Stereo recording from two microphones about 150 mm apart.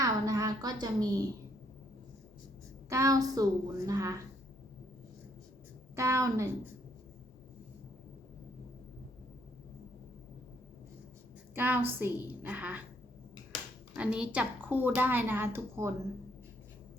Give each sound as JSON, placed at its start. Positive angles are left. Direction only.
{"t": 0.0, "sound": "a sound", "side_deg": -25}
{"t": 2.9, "sound": "a woman's voice", "side_deg": -20}
{"t": 6.0, "sound": "a woman's voice", "side_deg": -20}
{"t": 11.5, "sound": "a woman's voice", "side_deg": -15}
{"t": 13.9, "sound": "a woman's voice", "side_deg": -5}